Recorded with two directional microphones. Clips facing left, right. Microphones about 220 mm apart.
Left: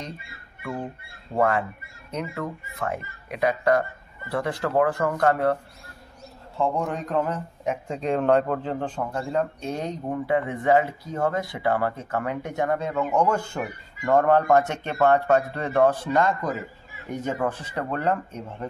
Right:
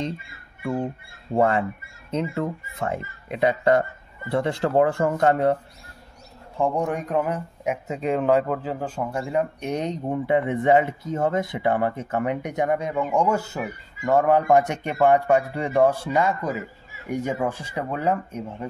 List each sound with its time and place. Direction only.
1.3 s speech: 25° right (ahead or behind)
6.6 s speech: 15° right (ahead or behind)